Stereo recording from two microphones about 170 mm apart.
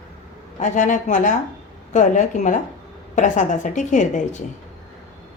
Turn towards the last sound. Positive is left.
turn(degrees=45)  # may be behind; listen again after turning